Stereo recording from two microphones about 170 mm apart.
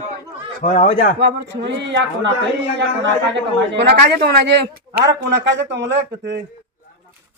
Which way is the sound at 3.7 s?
80° right.